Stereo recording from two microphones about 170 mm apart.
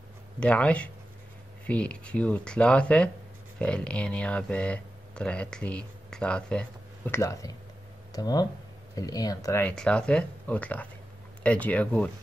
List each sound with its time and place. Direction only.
0.4 s speech: 5° left (ahead or behind)
7.1 s speech: 20° left (ahead or behind)